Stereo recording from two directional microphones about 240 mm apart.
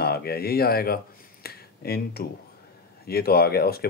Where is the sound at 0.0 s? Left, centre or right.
Left.